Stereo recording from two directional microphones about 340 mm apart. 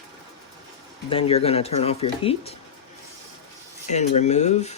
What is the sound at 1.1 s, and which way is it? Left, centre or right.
Speech, centre.